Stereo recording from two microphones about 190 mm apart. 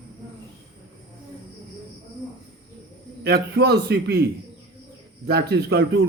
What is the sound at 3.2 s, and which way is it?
A man's voice, 55° right (ahead or behind).